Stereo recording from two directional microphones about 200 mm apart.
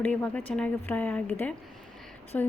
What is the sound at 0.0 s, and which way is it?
Speech, 10° left (ahead or behind).